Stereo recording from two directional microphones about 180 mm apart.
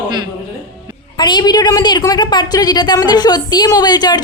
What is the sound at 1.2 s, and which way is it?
A woman's voice, 25° left (ahead or behind).